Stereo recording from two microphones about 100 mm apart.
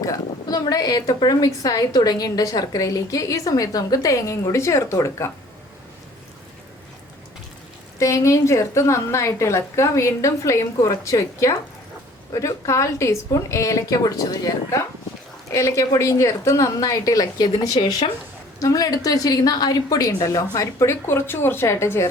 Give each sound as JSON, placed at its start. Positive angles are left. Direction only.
{"t": 0.0, "sound": "a woman's voice", "side_deg": 35}
{"t": 7.9, "sound": "a woman's voice", "side_deg": 30}